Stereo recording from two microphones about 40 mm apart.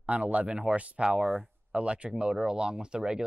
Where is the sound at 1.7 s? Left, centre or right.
Right.